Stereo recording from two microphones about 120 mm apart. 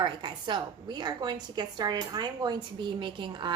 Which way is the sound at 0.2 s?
40° right (ahead or behind).